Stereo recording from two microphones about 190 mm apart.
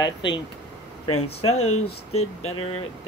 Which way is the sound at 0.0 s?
25° left (ahead or behind).